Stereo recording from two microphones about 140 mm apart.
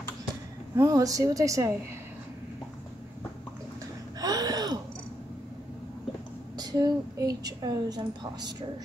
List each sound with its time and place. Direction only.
0.7 s a woman's voice: 25° right (ahead or behind)
4.2 s a sound: 25° right (ahead or behind)
6.5 s a woman's voice: 30° right (ahead or behind)